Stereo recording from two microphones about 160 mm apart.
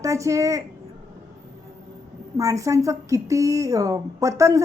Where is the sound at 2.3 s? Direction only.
20° right (ahead or behind).